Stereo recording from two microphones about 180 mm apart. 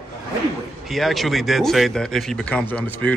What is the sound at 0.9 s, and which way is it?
Speech, centre (ahead or behind).